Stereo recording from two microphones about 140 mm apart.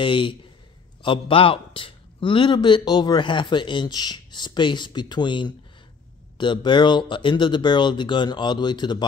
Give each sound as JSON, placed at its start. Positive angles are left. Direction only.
{"t": 0.0, "sound": "a man's voice", "side_deg": 35}